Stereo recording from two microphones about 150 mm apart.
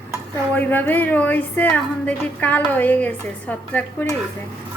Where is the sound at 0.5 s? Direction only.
15° left (ahead or behind).